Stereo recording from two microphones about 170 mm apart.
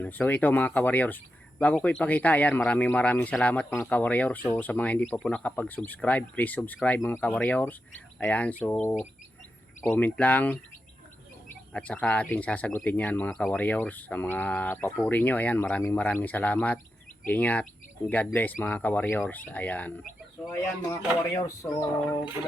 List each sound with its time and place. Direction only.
0.0 s speech: 10° left (ahead or behind)